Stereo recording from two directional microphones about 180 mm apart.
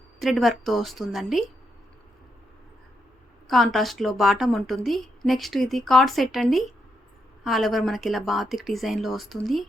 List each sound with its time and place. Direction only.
0.2 s a woman's voice: centre (ahead or behind)
3.4 s a woman's voice: centre (ahead or behind)